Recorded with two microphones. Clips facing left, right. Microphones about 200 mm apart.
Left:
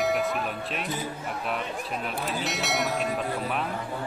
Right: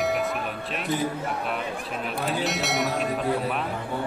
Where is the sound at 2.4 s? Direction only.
Centre (ahead or behind).